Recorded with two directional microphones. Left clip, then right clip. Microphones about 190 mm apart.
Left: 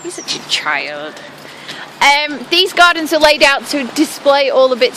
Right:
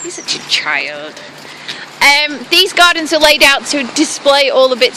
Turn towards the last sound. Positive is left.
turn(degrees=0)  # may be behind; listen again after turning